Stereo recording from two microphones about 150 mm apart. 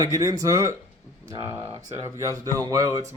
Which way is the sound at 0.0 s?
25° right (ahead or behind).